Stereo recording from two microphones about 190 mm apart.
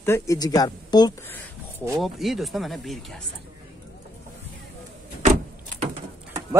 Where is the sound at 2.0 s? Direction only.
Centre (ahead or behind).